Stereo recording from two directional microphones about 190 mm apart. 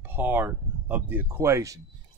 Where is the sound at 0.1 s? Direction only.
10° right (ahead or behind).